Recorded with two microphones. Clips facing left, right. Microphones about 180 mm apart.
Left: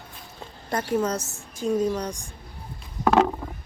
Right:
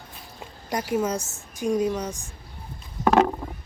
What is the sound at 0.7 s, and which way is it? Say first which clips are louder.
A woman's voice: even; 10° right (ahead or behind).